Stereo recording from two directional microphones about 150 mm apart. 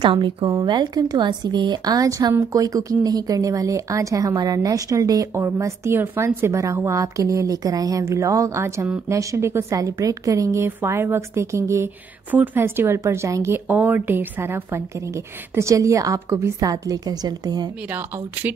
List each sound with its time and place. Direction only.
0.0 s speech: 35° right (ahead or behind)